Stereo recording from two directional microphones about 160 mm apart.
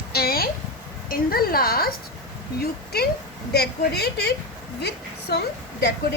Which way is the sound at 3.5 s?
90° left.